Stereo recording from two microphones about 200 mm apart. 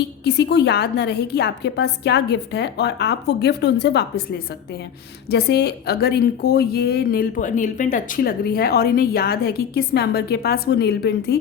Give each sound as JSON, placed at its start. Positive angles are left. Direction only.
{"t": 0.3, "sound": "a woman's voice", "side_deg": 55}